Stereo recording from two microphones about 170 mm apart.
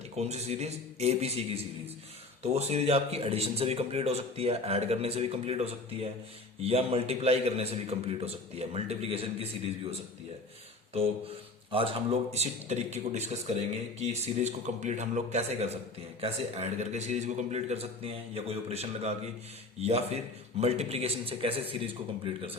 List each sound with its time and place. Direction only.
0.2 s speech: 40° right (ahead or behind)
10.9 s speech: 35° right (ahead or behind)